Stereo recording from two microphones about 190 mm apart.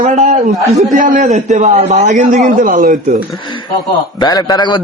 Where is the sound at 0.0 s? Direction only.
35° right (ahead or behind).